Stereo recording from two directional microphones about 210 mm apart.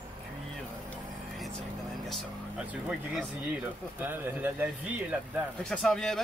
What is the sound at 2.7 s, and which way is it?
Speech, 5° right (ahead or behind).